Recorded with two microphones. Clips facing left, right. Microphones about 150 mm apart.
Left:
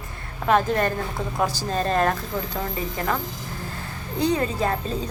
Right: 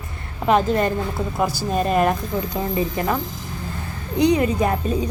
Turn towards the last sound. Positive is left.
turn(degrees=-15)  # may be behind; listen again after turning